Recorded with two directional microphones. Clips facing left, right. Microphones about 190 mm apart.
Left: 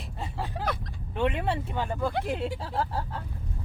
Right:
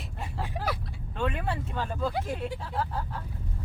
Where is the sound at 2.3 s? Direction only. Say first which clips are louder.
Left 2 dB; 30° left (ahead or behind).